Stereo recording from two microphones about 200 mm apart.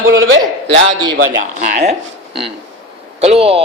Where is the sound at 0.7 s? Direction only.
70° right (ahead or behind).